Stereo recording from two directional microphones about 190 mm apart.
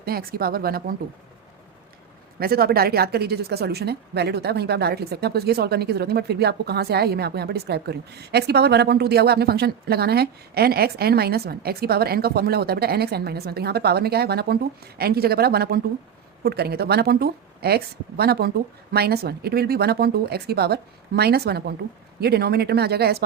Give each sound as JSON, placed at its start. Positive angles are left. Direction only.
{"t": 0.0, "sound": "speech", "side_deg": -55}
{"t": 2.4, "sound": "speech", "side_deg": -50}